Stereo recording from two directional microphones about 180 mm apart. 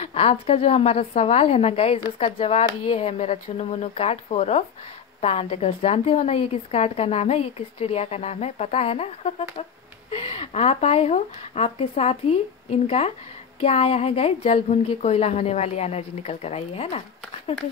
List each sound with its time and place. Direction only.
0.0 s a woman's voice: 35° left (ahead or behind)